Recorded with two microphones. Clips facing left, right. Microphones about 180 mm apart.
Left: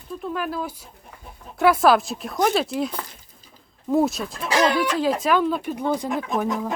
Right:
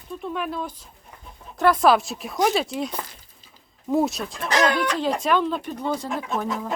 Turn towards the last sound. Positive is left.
turn(degrees=15)  # may be behind; listen again after turning